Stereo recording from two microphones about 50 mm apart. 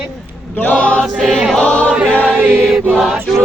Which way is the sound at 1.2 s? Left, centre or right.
Centre.